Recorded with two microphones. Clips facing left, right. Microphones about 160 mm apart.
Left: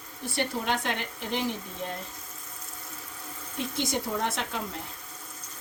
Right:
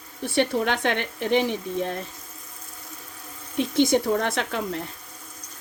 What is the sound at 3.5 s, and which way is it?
Speech, 75° right (ahead or behind).